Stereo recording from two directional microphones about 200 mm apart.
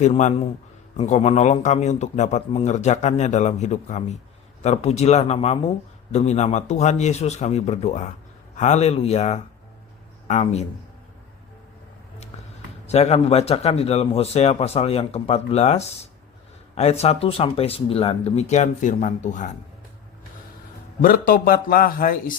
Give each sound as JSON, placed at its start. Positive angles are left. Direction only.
{"t": 0.0, "sound": "speech", "side_deg": 35}
{"t": 12.9, "sound": "speech", "side_deg": 35}
{"t": 21.0, "sound": "a man's voice", "side_deg": 45}